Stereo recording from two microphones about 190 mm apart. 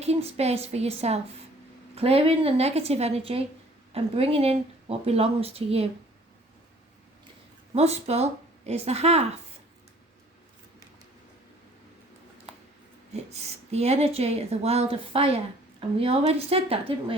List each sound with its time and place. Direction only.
0.0 s a woman's voice: 35° right (ahead or behind)
7.7 s a woman's voice: 35° right (ahead or behind)
13.1 s a woman's voice: 35° right (ahead or behind)